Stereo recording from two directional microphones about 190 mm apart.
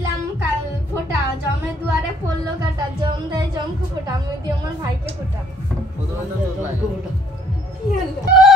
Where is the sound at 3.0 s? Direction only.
25° right (ahead or behind).